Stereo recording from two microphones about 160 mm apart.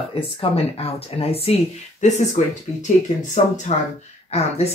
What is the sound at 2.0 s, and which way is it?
Speech, 50° left (ahead or behind).